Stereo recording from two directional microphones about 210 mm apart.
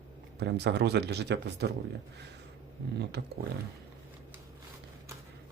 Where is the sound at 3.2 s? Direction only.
55° right (ahead or behind).